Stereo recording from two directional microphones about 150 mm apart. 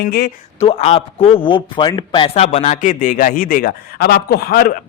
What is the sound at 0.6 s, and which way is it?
A man's voice, 45° left (ahead or behind).